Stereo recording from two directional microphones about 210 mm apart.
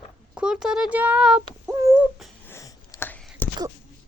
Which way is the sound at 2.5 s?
15° left (ahead or behind).